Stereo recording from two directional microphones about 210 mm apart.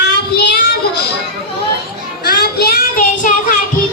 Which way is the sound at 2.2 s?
45° left (ahead or behind).